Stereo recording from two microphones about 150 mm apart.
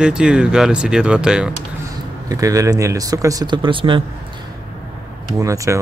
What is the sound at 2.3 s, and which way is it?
Speech, 20° right (ahead or behind).